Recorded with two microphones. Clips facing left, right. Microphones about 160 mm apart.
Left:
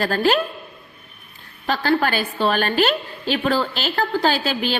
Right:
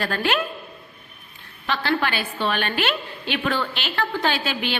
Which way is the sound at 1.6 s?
40° left (ahead or behind).